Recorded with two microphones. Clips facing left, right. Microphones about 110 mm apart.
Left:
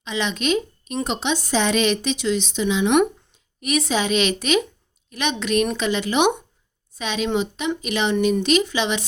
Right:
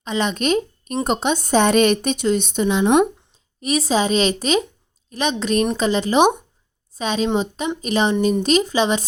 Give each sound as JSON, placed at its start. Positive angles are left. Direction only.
{"t": 0.0, "sound": "speech", "side_deg": -45}
{"t": 2.9, "sound": "a woman's voice", "side_deg": -30}